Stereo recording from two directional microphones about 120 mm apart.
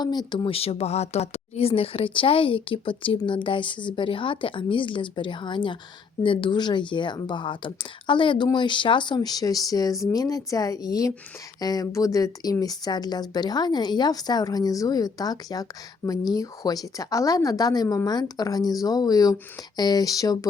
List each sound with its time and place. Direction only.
0.0 s a woman's voice: 35° left (ahead or behind)